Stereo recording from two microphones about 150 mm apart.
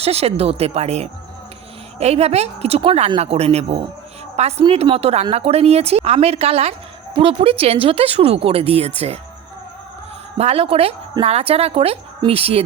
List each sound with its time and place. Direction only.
0.0 s a woman's voice: 45° right (ahead or behind)
10.3 s speech: 45° right (ahead or behind)